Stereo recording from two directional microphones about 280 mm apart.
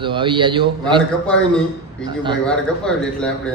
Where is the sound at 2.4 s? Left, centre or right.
Centre.